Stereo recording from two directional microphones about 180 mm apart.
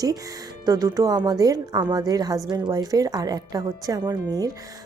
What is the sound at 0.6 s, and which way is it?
A woman's voice, 20° right (ahead or behind).